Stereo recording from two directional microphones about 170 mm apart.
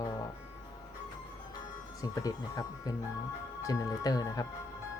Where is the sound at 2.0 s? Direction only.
20° left (ahead or behind).